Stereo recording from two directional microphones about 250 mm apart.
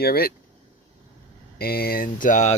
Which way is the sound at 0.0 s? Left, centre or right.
Left.